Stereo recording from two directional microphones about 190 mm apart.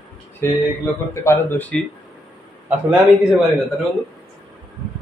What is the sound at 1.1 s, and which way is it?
Speech, 15° left (ahead or behind).